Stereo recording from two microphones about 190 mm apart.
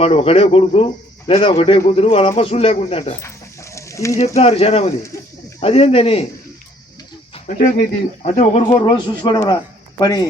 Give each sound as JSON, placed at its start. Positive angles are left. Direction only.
{"t": 0.0, "sound": "speech", "side_deg": 30}
{"t": 3.8, "sound": "bird", "side_deg": 15}
{"t": 4.4, "sound": "speech", "side_deg": 35}
{"t": 7.4, "sound": "speech", "side_deg": 40}
{"t": 8.8, "sound": "speech", "side_deg": 20}